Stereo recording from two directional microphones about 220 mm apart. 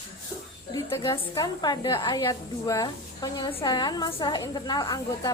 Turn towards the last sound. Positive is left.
turn(degrees=15)  # may be behind; listen again after turning